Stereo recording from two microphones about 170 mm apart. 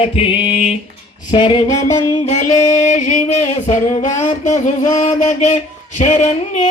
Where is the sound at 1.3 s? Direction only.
30° left (ahead or behind).